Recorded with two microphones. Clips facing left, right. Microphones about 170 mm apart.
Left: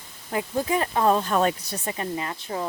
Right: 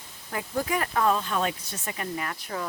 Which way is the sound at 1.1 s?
40° left (ahead or behind).